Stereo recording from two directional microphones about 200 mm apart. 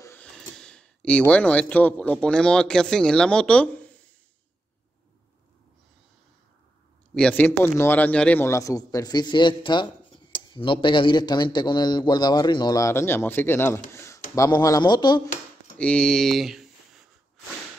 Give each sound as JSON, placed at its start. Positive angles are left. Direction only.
{"t": 0.0, "sound": "speech", "side_deg": 10}
{"t": 7.2, "sound": "a man's voice", "side_deg": 5}
{"t": 15.8, "sound": "speech", "side_deg": 5}